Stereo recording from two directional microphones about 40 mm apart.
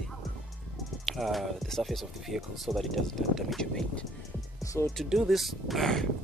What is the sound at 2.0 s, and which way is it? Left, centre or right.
Speech, centre.